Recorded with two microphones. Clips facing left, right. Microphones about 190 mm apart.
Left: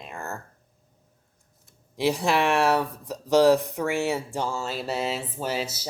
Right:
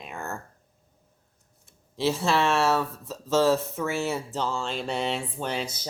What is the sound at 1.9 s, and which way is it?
Speech, 15° left (ahead or behind).